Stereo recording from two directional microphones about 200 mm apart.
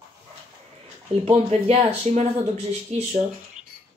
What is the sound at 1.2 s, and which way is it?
Speech, 30° right (ahead or behind).